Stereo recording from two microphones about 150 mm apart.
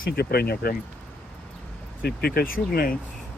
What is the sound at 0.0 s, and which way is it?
Speech, 90° left.